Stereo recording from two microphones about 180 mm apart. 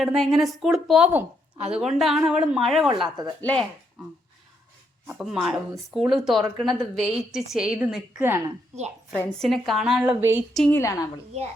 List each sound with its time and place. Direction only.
0.0 s a woman's voice: centre (ahead or behind)
5.0 s a woman's voice: 5° right (ahead or behind)
9.4 s a woman's voice: centre (ahead or behind)
10.5 s a woman's voice: 5° left (ahead or behind)
10.8 s a woman's voice: 20° left (ahead or behind)